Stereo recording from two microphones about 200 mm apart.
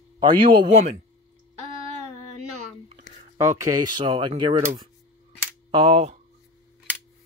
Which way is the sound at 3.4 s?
15° right (ahead or behind).